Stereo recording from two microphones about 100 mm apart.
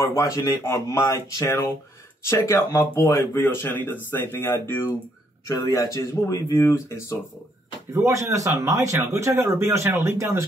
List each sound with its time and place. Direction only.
0.0 s speech: 30° left (ahead or behind)
5.5 s speech: 35° left (ahead or behind)
7.9 s speech: 30° right (ahead or behind)